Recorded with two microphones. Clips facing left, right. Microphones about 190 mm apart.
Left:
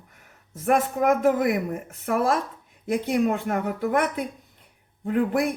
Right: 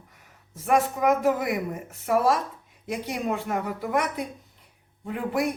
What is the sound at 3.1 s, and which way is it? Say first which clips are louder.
Speech: left 4 dB; 50° left (ahead or behind).